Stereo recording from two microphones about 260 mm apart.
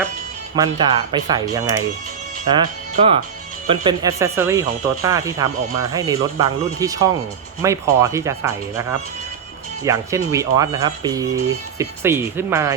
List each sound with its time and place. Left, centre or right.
0.5 s speech: centre
2.9 s speech: right; by 12.7 s centre